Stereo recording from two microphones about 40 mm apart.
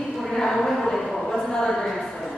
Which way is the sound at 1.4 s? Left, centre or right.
Centre.